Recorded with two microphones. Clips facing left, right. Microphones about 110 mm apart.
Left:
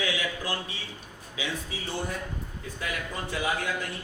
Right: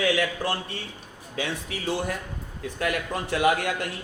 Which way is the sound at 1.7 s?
90° right.